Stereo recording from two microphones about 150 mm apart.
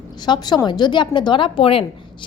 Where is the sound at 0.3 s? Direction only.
30° left (ahead or behind).